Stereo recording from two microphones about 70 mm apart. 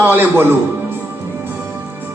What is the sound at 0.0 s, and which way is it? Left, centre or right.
Speech, right.